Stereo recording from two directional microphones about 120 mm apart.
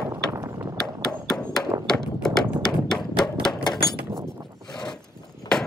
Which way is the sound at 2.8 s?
5° left (ahead or behind).